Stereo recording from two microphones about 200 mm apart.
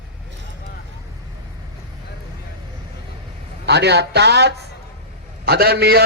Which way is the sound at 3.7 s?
55° right (ahead or behind).